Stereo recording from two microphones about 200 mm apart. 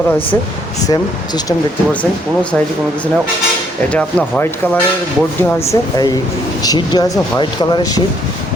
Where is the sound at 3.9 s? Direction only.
5° left (ahead or behind).